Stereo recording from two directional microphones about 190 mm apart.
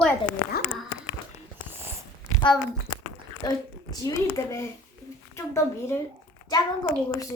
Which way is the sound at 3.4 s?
20° left (ahead or behind).